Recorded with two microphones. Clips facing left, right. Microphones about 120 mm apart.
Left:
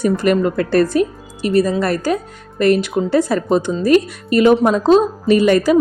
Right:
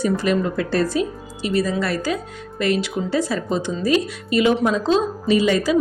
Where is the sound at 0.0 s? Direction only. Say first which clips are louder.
Left 5 dB; 55° left (ahead or behind).